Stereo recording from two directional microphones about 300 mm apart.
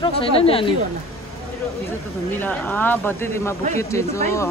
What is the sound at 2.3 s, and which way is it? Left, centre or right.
Speech, centre.